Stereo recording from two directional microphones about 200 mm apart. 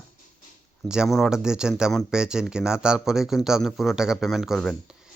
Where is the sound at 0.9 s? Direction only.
Centre (ahead or behind).